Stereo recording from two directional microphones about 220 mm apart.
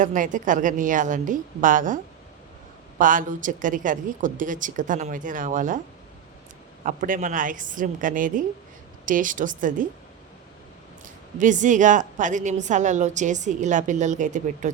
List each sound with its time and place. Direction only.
0.0 s a woman's voice: 35° right (ahead or behind)
3.0 s a woman's voice: 35° right (ahead or behind)
6.8 s a woman's voice: 40° right (ahead or behind)
11.0 s a woman's voice: 35° right (ahead or behind)